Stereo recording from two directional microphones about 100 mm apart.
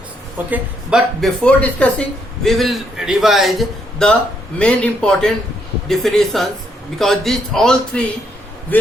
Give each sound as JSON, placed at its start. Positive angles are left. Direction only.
{"t": 0.9, "sound": "a man's voice", "side_deg": -5}
{"t": 1.5, "sound": "speech", "side_deg": 15}
{"t": 2.5, "sound": "a man's voice", "side_deg": 0}
{"t": 8.7, "sound": "speech", "side_deg": 20}